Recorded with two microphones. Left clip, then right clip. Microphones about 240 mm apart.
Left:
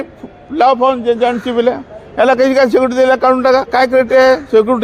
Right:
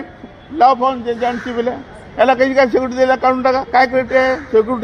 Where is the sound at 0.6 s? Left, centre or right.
Left.